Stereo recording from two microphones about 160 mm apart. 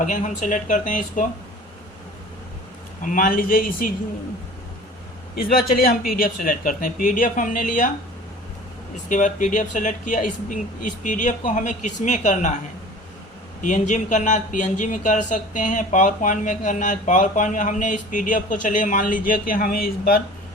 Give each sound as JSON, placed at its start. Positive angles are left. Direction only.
{"t": 0.0, "sound": "speech", "side_deg": 55}
{"t": 3.0, "sound": "speech", "side_deg": 60}
{"t": 5.6, "sound": "a woman's voice", "side_deg": 70}
{"t": 9.0, "sound": "speech", "side_deg": 50}
{"t": 13.6, "sound": "speech", "side_deg": 50}